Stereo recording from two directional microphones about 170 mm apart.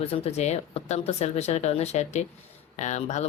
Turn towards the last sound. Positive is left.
turn(degrees=45)  # may be behind; listen again after turning